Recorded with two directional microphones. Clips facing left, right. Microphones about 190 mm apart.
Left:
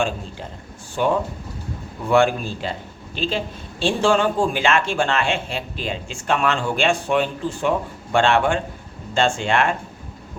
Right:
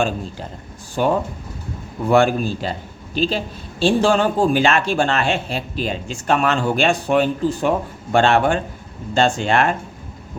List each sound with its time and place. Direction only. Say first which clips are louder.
1.0 s speech: right 2 dB; 40° right (ahead or behind)